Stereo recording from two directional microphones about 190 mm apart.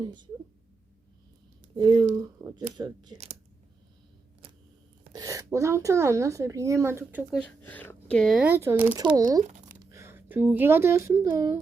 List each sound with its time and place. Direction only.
0.0 s speech: 25° right (ahead or behind)
1.7 s speech: 25° right (ahead or behind)
2.2 s a sound: 15° right (ahead or behind)
2.7 s speech: 20° right (ahead or behind)
5.1 s a woman's voice: 20° right (ahead or behind)
7.4 s speech: 10° left (ahead or behind)
8.4 s a woman's voice: 10° right (ahead or behind)